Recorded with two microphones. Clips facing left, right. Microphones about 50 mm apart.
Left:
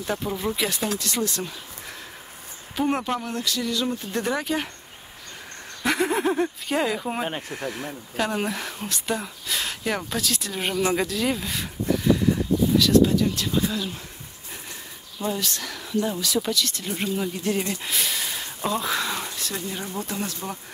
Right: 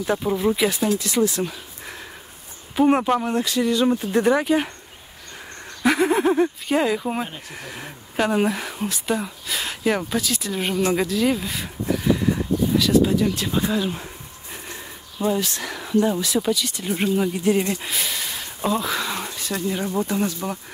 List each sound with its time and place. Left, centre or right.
0.0 s speech: centre
5.8 s speech: centre
12.7 s speech: centre; by 14.0 s right
15.2 s speech: centre
17.8 s speech: centre